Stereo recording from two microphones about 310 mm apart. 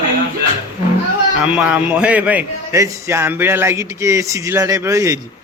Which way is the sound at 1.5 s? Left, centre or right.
Centre.